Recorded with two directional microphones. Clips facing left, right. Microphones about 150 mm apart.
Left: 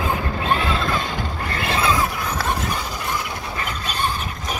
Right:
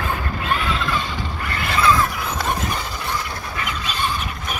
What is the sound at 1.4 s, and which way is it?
Mechanisms, 30° left (ahead or behind).